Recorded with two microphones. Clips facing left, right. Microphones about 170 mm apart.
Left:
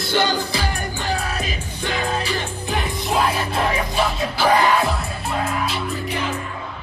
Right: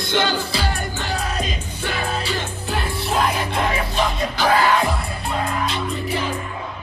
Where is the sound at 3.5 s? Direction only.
5° left (ahead or behind).